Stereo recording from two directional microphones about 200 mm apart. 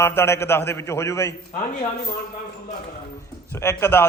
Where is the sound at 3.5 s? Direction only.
10° left (ahead or behind).